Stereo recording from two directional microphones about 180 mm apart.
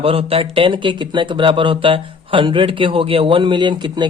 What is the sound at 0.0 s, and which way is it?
Speech, 30° right (ahead or behind).